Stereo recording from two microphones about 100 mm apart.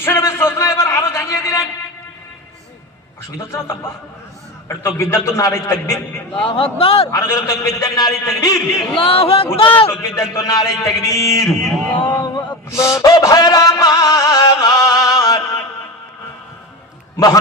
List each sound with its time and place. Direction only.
0.0 s a sound: 25° left (ahead or behind)
3.5 s a man's voice: 25° left (ahead or behind)
6.3 s speech: 60° left (ahead or behind)
7.1 s a man's voice: 30° left (ahead or behind)
9.0 s a man's voice: 70° left (ahead or behind)
9.9 s a man's voice: 30° left (ahead or behind)
12.7 s music: 30° left (ahead or behind)